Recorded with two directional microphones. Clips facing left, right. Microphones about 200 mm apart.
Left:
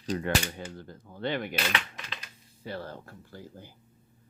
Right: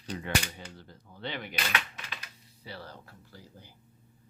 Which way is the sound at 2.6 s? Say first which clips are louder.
Left 7 dB; 50° left (ahead or behind).